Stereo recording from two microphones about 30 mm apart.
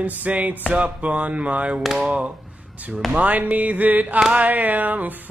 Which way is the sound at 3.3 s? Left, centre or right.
Right.